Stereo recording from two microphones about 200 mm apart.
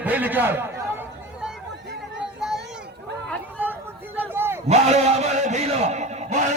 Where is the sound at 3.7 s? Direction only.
10° right (ahead or behind).